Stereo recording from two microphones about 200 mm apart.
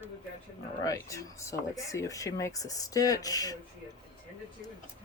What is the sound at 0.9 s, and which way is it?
Speech, 15° left (ahead or behind).